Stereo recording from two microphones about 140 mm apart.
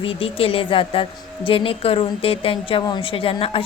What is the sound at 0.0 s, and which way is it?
A woman's voice, 40° left (ahead or behind).